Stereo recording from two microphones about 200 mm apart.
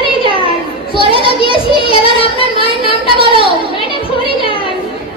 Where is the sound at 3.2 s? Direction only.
25° right (ahead or behind).